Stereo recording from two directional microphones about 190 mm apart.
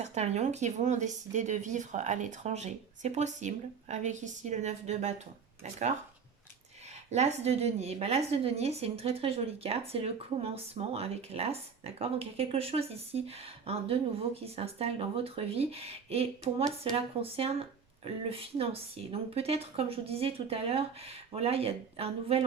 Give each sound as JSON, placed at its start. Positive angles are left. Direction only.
{"t": 0.0, "sound": "a woman's voice", "side_deg": -35}
{"t": 7.1, "sound": "a woman's voice", "side_deg": -35}